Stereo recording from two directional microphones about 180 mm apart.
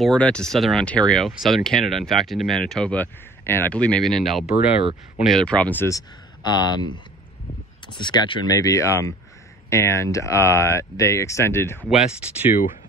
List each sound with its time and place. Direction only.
0.0 s speech: 5° left (ahead or behind)
7.9 s speech: 25° left (ahead or behind)
11.8 s speech: 5° right (ahead or behind)